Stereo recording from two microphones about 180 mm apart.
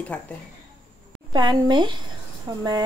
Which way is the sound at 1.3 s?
25° right (ahead or behind).